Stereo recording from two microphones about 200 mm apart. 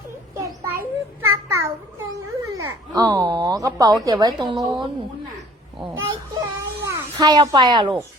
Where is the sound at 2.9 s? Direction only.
20° right (ahead or behind).